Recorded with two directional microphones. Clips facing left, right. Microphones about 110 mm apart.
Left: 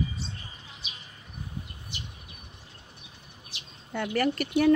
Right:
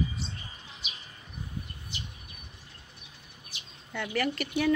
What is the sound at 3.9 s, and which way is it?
Speech, 45° left (ahead or behind).